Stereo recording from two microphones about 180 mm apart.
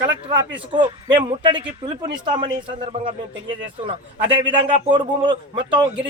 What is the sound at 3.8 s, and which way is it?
A man's voice, 30° right (ahead or behind).